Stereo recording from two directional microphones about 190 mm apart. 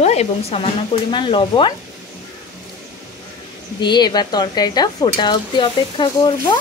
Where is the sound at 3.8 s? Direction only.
25° left (ahead or behind).